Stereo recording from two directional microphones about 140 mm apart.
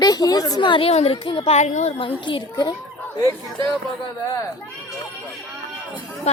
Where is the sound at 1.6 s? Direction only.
55° left (ahead or behind); by 2.7 s 35° left (ahead or behind).